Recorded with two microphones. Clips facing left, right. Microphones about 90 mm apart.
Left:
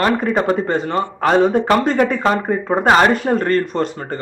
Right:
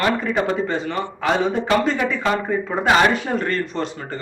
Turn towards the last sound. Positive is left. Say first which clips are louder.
# left 5 dB
turn(degrees=45)  # may be behind; listen again after turning